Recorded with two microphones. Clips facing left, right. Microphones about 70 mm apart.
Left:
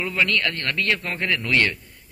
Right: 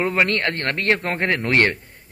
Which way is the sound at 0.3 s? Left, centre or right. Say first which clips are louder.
Right 2 dB; right.